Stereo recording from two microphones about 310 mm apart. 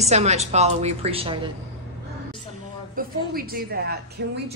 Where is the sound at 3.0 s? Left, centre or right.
Right.